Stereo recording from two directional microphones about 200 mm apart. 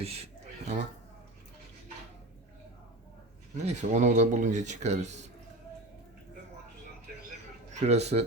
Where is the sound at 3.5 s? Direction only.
35° right (ahead or behind).